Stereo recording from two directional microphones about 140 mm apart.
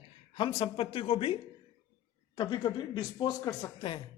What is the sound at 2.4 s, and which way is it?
A woman's voice, 30° left (ahead or behind).